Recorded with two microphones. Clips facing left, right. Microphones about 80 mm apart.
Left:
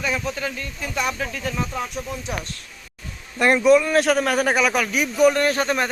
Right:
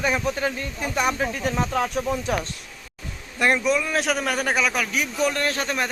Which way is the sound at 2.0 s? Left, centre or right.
Right.